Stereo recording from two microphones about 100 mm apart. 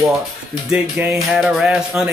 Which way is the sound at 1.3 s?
5° right (ahead or behind).